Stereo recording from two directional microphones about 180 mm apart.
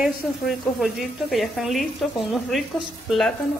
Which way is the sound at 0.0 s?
Centre (ahead or behind).